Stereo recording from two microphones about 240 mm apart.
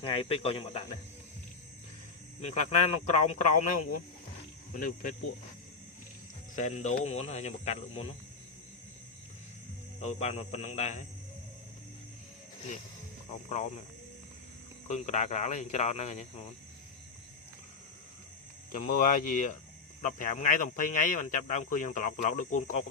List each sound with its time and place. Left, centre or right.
0.0 s speech: left
2.4 s speech: left
6.6 s speech: left
10.0 s speech: left
13.5 s speech: left
14.8 s speech: left
18.7 s speech: left